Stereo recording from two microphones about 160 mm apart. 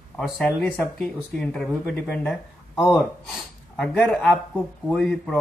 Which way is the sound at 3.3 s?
5° left (ahead or behind).